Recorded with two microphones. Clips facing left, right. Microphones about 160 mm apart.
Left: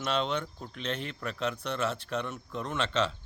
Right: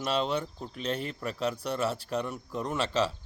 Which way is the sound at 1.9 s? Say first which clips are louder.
Right 2 dB; 10° right (ahead or behind).